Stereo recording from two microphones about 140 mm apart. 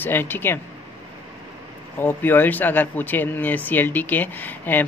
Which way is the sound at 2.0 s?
15° left (ahead or behind).